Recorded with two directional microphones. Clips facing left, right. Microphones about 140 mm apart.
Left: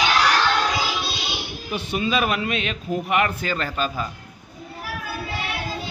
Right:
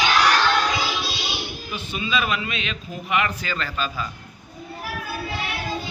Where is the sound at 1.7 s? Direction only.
65° left (ahead or behind); by 4.0 s 45° left (ahead or behind).